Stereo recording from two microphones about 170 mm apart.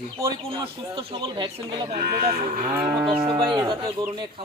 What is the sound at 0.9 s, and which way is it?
Speech, 30° right (ahead or behind).